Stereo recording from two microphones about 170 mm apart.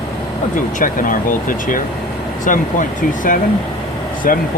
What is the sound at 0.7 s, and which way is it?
Speech, 50° left (ahead or behind).